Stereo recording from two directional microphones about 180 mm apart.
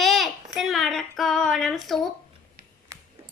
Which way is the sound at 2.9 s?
20° right (ahead or behind).